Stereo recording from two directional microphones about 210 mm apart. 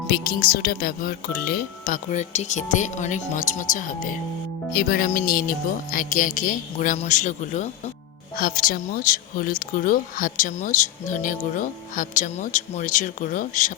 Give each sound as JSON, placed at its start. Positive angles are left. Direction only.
{"t": 0.1, "sound": "speech", "side_deg": 45}